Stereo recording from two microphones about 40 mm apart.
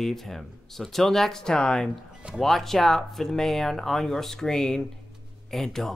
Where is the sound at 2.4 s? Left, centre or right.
Centre.